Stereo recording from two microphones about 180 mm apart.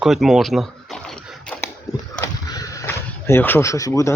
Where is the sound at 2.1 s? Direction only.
20° left (ahead or behind).